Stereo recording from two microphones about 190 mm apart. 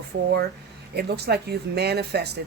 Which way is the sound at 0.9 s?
60° right (ahead or behind).